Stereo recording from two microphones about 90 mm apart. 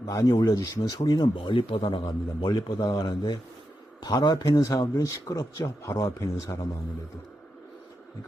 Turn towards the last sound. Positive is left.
turn(degrees=35)  # may be behind; listen again after turning